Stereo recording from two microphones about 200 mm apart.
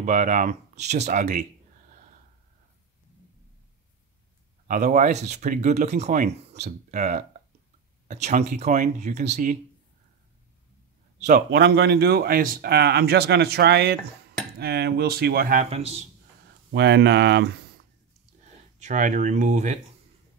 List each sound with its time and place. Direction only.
0.0 s speech: 40° right (ahead or behind)
4.6 s speech: 40° right (ahead or behind)
11.5 s speech: 55° right (ahead or behind); by 16.1 s 30° right (ahead or behind)
16.7 s speech: 60° right (ahead or behind)
18.8 s speech: 40° right (ahead or behind)